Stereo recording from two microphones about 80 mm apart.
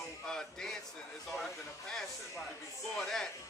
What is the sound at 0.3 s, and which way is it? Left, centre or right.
Music, centre.